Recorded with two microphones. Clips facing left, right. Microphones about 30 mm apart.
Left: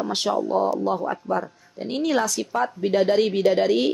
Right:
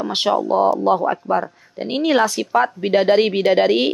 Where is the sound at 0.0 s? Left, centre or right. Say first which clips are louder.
Right 5 dB; right.